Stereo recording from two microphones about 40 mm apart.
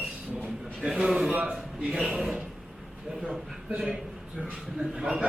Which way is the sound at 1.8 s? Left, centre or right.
Right.